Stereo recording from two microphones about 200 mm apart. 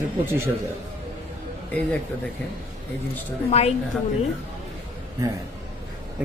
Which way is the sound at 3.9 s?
Centre (ahead or behind).